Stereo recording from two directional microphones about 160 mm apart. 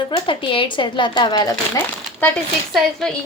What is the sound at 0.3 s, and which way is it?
A woman's voice, 30° left (ahead or behind).